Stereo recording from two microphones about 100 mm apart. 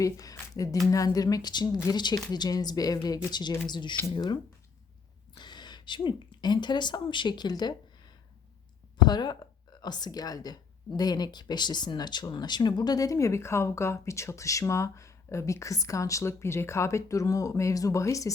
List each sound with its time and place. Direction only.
0.0 s a sound: 35° left (ahead or behind)
0.9 s speech: 35° left (ahead or behind)
5.4 s a woman's voice: 50° left (ahead or behind); by 18.3 s 30° left (ahead or behind)